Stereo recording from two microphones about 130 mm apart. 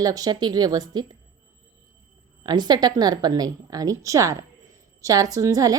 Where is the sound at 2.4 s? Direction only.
35° right (ahead or behind).